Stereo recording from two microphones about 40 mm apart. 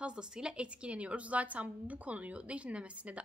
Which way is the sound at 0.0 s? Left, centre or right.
Right.